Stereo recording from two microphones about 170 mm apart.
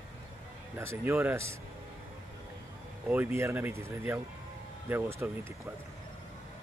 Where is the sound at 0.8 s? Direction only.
15° right (ahead or behind).